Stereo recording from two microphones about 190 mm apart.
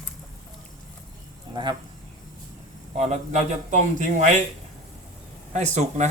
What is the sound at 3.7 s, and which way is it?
Speech, 40° right (ahead or behind).